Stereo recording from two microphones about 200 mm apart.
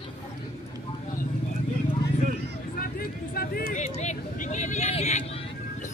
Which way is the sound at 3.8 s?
35° left (ahead or behind).